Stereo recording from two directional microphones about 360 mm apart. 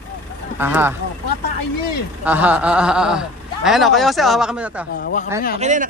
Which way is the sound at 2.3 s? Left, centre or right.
Centre.